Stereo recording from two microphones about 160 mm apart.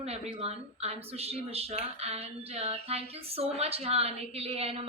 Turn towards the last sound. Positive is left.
turn(degrees=-40)  # may be behind; listen again after turning